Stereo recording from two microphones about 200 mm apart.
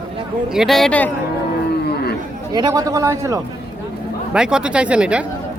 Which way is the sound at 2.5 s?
20° right (ahead or behind).